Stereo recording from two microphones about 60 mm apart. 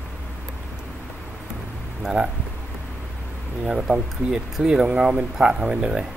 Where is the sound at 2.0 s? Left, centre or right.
Centre.